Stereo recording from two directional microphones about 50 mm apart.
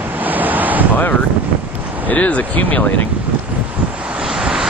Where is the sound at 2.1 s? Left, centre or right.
Left.